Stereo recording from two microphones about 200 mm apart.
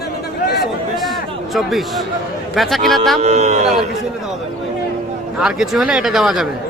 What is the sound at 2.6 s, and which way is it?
Speech, centre (ahead or behind).